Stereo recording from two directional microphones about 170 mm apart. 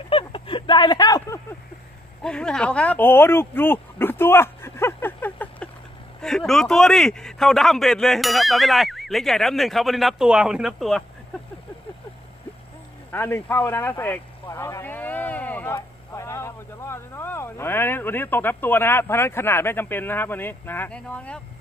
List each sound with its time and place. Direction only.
0.1 s a sound: 30° left (ahead or behind)
2.2 s a man's voice: 5° left (ahead or behind)
13.1 s speech: 10° left (ahead or behind)